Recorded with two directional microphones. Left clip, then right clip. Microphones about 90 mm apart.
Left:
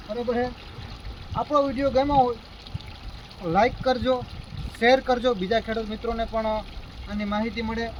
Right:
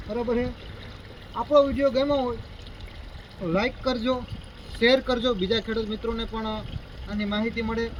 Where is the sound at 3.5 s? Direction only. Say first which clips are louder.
Left 5 dB; 50° left (ahead or behind).